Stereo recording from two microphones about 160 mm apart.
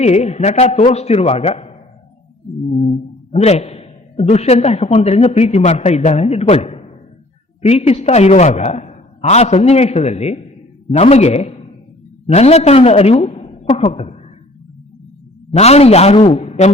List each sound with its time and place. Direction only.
0.0 s a man's voice: 45° left (ahead or behind)
2.7 s a man's voice: 45° left (ahead or behind)
15.5 s a man's voice: 40° left (ahead or behind)